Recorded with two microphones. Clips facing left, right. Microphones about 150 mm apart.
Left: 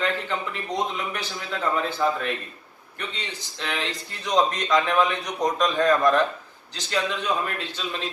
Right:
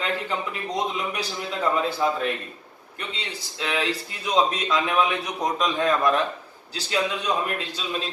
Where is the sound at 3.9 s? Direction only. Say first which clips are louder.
Right 2 dB; 5° right (ahead or behind).